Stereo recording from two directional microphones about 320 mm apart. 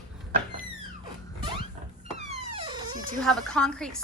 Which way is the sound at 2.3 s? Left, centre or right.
Centre.